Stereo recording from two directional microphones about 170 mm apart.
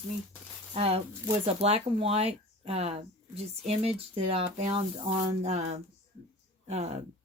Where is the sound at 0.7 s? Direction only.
35° right (ahead or behind).